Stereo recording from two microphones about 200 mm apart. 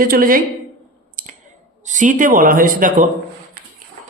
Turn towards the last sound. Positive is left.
turn(degrees=-45)  # may be behind; listen again after turning